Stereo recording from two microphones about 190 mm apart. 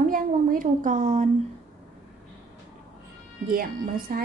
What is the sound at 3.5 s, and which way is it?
Speech, 50° right (ahead or behind).